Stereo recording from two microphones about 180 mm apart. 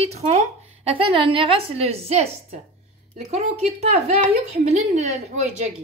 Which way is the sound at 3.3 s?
35° right (ahead or behind).